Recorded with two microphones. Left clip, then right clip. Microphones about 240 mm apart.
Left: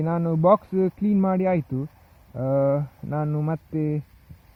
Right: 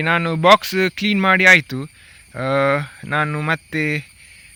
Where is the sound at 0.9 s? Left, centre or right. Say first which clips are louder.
Right 9 dB; right.